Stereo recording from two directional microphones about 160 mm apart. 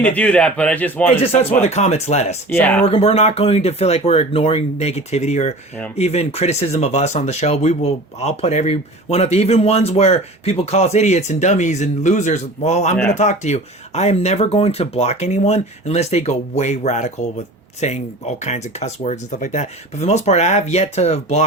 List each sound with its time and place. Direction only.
0.0 s speech: 10° left (ahead or behind)
1.2 s speech: 40° left (ahead or behind)
2.5 s speech: 10° left (ahead or behind)
2.8 s speech: 40° left (ahead or behind)